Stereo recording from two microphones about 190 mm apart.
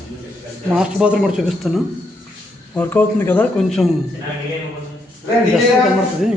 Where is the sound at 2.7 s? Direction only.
10° left (ahead or behind).